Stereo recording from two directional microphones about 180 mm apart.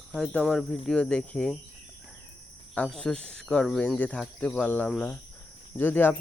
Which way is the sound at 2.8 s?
5° left (ahead or behind).